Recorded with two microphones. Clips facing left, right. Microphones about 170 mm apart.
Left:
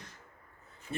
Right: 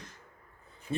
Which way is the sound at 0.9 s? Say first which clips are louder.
Right 3 dB; 15° right (ahead or behind).